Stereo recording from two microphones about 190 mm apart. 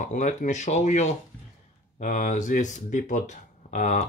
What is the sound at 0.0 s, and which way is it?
Speech, 40° left (ahead or behind).